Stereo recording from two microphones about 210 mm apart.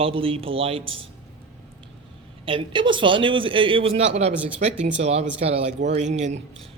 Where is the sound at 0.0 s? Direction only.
25° right (ahead or behind).